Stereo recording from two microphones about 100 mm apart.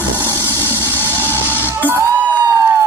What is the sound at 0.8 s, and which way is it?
Music, 20° left (ahead or behind).